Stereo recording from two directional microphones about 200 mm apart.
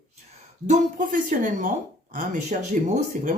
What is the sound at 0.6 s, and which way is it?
Speech, 40° right (ahead or behind).